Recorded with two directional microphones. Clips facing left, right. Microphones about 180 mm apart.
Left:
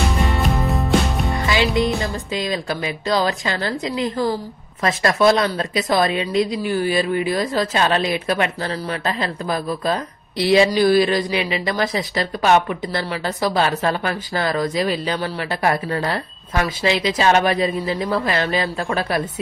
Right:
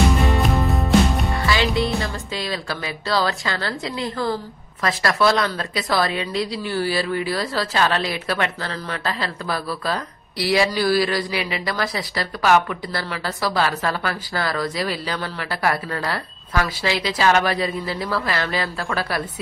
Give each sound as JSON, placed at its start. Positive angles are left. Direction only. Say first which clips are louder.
{"t": 0.2, "sound": "music", "louder": "right 1 dB", "side_deg": 0}
{"t": 1.3, "sound": "a woman's voice", "louder": "left 2 dB", "side_deg": 20}